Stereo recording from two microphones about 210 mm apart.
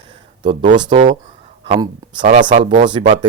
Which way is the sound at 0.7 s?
20° right (ahead or behind).